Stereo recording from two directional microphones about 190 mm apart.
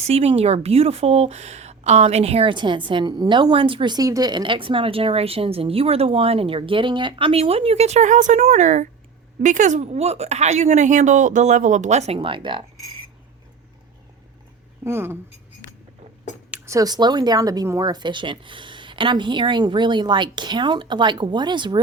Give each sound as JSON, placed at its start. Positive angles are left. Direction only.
{"t": 0.1, "sound": "a woman's voice", "side_deg": -30}
{"t": 14.8, "sound": "speech", "side_deg": -10}
{"t": 16.5, "sound": "speech", "side_deg": -15}